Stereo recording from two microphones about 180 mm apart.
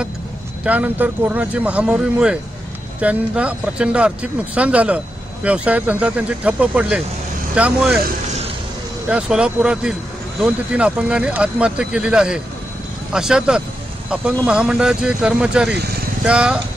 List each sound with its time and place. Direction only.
0.7 s speech: 10° right (ahead or behind)
9.1 s speech: 5° right (ahead or behind)